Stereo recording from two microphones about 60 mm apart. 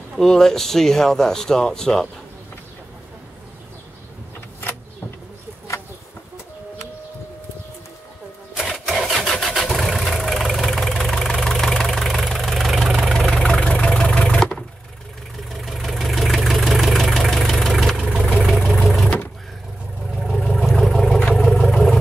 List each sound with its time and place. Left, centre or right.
0.1 s speech: centre
8.7 s vehicle: centre
13.4 s vehicle: centre
18.1 s vehicle: centre
20.2 s vehicle: centre